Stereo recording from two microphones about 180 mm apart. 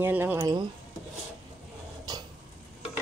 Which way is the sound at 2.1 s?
20° right (ahead or behind).